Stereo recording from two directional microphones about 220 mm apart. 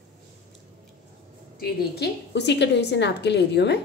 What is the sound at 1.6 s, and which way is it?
A woman's voice, 50° left (ahead or behind).